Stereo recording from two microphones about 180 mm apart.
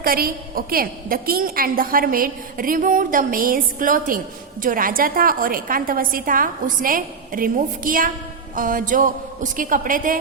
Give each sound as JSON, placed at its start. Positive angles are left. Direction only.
{"t": 0.0, "sound": "a woman's voice", "side_deg": -55}